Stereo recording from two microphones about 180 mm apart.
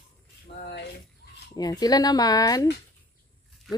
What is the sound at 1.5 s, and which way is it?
Speech, 20° left (ahead or behind).